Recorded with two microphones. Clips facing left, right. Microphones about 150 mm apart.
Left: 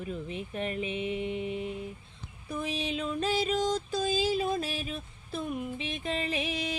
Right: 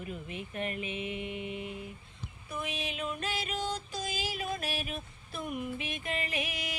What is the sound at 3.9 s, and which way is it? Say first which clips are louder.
Music: left 9 dB; 30° left (ahead or behind).